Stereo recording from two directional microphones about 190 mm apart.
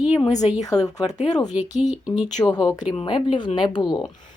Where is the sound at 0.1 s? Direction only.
20° left (ahead or behind).